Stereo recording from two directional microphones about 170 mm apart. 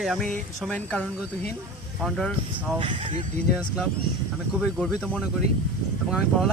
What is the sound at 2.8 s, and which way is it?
Speech, 30° right (ahead or behind).